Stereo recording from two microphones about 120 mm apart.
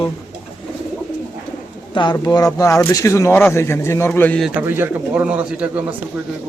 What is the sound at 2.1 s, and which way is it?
Speech, 30° left (ahead or behind).